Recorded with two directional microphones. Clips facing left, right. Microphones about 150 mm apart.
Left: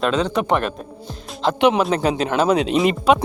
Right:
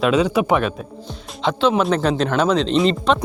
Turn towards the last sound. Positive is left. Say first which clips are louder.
# left 1 dB
turn(degrees=10)  # may be behind; listen again after turning